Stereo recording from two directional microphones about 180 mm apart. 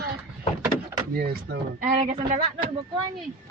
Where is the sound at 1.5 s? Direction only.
65° right (ahead or behind).